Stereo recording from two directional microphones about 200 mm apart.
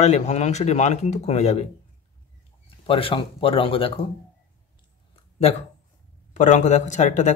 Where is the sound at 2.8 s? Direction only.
25° left (ahead or behind).